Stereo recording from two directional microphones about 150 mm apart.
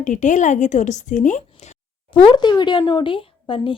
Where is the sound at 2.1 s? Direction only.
35° left (ahead or behind).